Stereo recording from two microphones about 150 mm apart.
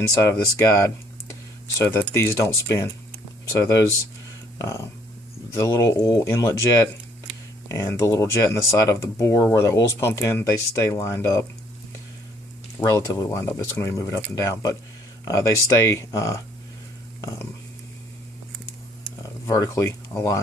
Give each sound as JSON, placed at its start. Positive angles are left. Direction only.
{"t": 0.2, "sound": "speech", "side_deg": 20}
{"t": 12.7, "sound": "speech", "side_deg": 20}
{"t": 19.4, "sound": "speech", "side_deg": 20}